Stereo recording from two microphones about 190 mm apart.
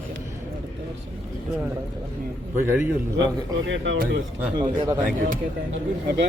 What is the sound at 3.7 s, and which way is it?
Speech, 80° right.